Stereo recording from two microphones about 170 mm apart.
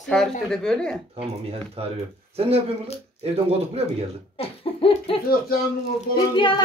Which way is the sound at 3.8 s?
35° right (ahead or behind).